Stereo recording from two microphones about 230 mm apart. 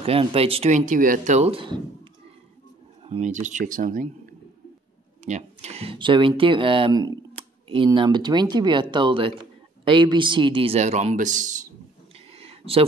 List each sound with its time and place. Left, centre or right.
0.0 s speech: right
3.0 s a man's voice: right
12.3 s a sound: right